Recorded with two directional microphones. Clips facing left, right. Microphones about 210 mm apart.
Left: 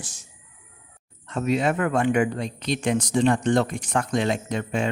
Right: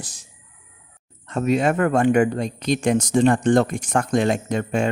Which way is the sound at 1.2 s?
45° right (ahead or behind).